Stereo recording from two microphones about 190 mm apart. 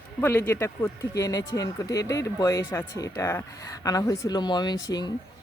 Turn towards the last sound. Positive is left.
turn(degrees=20)  # may be behind; listen again after turning